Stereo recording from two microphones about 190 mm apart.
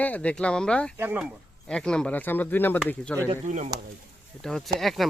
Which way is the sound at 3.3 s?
40° right (ahead or behind).